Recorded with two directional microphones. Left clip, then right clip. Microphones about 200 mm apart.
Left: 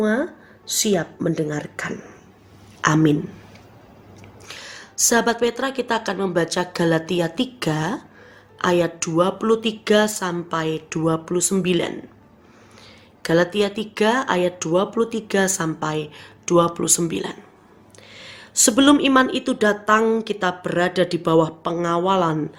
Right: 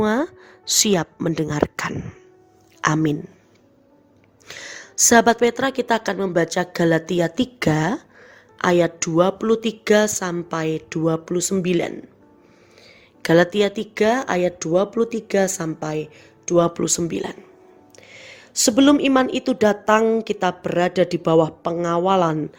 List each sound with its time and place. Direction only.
0.0 s speech: 55° right (ahead or behind)
4.4 s a woman's voice: 35° right (ahead or behind)
13.2 s a woman's voice: 40° right (ahead or behind)